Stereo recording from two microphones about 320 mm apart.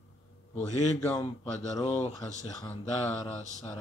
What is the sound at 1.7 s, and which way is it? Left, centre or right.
Speech, left.